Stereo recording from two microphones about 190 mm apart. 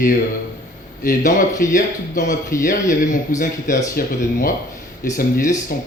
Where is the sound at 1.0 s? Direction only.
45° left (ahead or behind).